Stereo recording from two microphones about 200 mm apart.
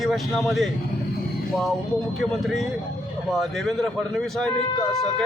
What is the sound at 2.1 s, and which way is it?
A man's voice, centre (ahead or behind).